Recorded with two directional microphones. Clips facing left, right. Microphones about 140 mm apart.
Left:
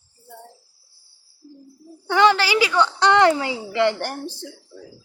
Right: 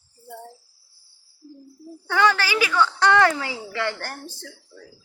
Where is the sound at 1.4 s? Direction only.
30° left (ahead or behind).